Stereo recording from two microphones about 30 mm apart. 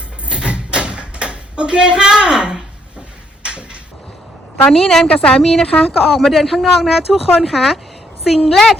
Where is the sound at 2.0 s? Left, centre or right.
Right.